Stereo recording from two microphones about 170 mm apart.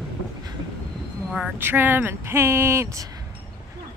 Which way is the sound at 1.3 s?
10° right (ahead or behind).